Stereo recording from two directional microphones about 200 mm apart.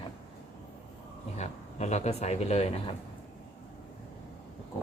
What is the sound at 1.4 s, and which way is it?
Speech, 35° left (ahead or behind).